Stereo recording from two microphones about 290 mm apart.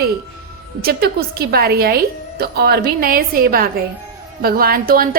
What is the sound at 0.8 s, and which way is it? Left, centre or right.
A woman's voice, right.